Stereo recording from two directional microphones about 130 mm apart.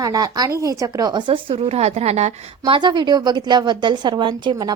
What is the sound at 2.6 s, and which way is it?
A woman's voice, 35° right (ahead or behind).